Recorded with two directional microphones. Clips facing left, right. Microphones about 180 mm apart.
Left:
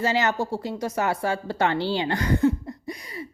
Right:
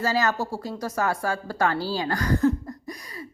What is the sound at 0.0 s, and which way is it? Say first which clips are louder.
Speech: left 1 dB; 20° left (ahead or behind).